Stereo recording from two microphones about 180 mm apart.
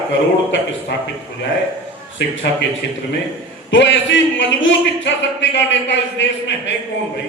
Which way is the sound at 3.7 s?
90° left.